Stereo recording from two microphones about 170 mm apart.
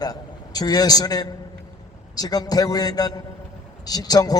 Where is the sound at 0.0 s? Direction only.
20° left (ahead or behind).